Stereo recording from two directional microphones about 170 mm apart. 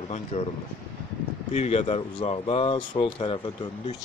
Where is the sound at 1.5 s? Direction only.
40° left (ahead or behind).